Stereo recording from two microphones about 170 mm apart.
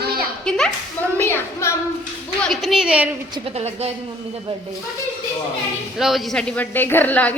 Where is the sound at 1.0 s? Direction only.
10° left (ahead or behind).